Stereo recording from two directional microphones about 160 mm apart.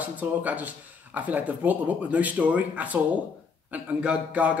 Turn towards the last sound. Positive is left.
turn(degrees=-10)  # may be behind; listen again after turning